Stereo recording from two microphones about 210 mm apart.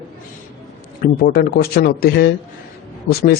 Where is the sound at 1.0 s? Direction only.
45° left (ahead or behind).